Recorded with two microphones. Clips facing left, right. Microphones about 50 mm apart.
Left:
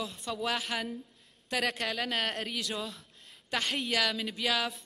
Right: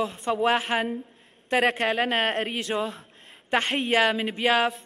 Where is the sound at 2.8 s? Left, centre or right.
Right.